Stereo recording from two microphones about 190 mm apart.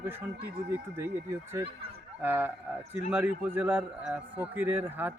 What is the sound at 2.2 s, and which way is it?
A man's voice, 10° right (ahead or behind).